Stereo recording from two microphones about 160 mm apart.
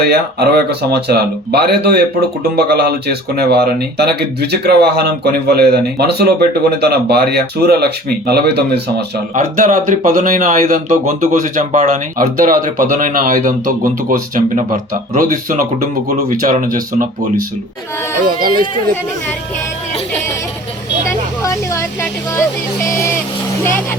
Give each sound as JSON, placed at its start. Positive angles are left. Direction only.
{"t": 0.0, "sound": "speech", "side_deg": -90}
{"t": 9.3, "sound": "speech", "side_deg": -55}
{"t": 21.4, "sound": "music", "side_deg": 20}